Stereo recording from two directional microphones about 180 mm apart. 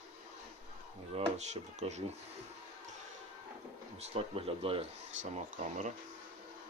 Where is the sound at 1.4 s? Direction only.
40° right (ahead or behind).